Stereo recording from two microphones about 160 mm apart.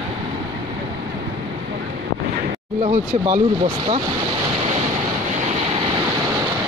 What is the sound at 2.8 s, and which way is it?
Speech, 45° right (ahead or behind).